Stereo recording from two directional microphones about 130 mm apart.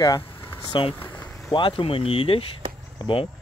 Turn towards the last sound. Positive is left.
turn(degrees=40)  # may be behind; listen again after turning